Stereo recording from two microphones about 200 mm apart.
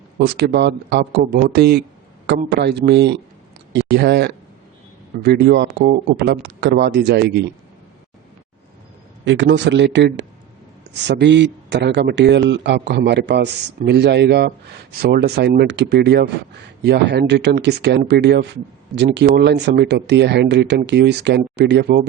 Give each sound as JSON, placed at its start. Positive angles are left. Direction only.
{"t": 0.3, "sound": "a man's voice", "side_deg": -55}
{"t": 9.2, "sound": "a man's voice", "side_deg": -65}